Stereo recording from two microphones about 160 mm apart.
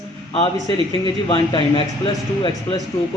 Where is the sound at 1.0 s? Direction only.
30° left (ahead or behind).